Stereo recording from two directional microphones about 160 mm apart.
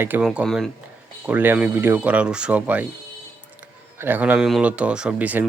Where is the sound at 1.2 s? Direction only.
10° right (ahead or behind).